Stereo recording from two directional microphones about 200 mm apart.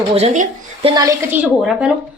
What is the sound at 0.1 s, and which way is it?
A woman's voice, 30° right (ahead or behind).